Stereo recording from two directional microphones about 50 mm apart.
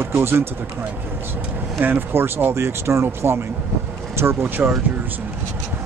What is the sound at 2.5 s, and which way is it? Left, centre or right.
Speech, right.